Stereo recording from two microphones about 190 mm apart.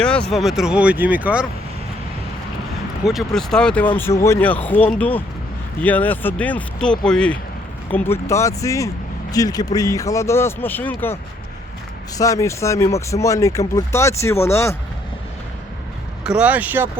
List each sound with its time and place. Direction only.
0.0 s speech: 5° left (ahead or behind)
3.0 s speech: centre (ahead or behind)
16.2 s speech: 5° right (ahead or behind)